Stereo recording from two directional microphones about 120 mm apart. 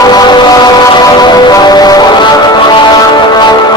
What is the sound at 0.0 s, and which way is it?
Vehicle, 35° left (ahead or behind).